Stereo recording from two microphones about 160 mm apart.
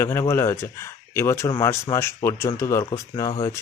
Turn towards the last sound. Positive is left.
turn(degrees=20)  # may be behind; listen again after turning